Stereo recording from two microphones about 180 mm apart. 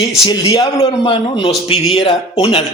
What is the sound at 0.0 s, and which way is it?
A man's voice, 30° left (ahead or behind).